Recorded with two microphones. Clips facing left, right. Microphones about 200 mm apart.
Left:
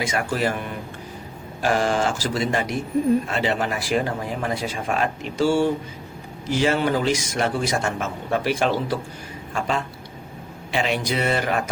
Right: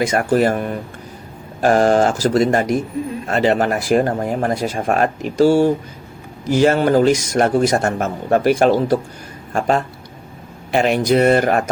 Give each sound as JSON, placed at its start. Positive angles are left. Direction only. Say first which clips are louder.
{"t": 0.0, "sound": "speech", "louder": "right 8 dB", "side_deg": -40}